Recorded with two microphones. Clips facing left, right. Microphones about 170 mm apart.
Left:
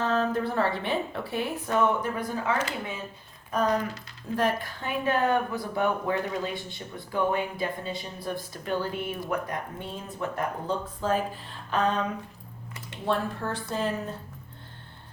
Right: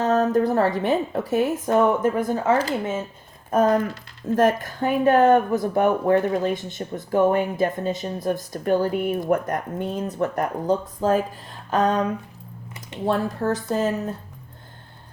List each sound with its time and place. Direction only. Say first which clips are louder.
0.0 s a woman's voice: right 7 dB; 45° right (ahead or behind)
13.1 s a woman's voice: right 6 dB; 40° right (ahead or behind)